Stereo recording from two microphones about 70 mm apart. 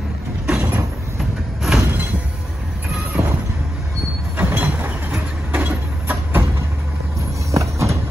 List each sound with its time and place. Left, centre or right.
0.5 s vehicle: right
1.7 s a sound: centre
3.2 s vehicle: right
4.4 s vehicle: right
7.5 s vehicle: right